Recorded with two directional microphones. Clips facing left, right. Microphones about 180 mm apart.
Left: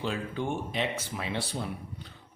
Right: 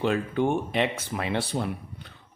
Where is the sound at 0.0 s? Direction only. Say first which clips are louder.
Right 8 dB; 60° right (ahead or behind).